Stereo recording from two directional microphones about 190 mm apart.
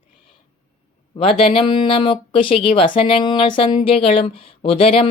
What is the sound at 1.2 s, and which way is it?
Speech, 30° left (ahead or behind).